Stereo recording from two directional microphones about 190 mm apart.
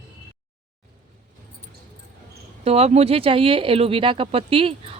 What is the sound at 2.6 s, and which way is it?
Speech, 35° right (ahead or behind).